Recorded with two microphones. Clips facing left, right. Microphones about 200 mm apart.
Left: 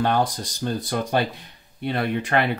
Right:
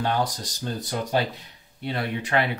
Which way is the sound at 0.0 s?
55° left (ahead or behind).